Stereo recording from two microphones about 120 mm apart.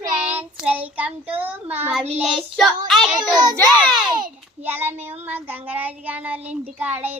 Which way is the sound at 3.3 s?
35° right (ahead or behind).